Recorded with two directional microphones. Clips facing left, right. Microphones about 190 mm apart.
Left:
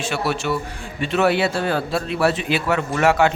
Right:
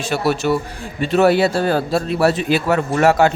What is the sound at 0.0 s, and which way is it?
A man's voice, 40° right (ahead or behind).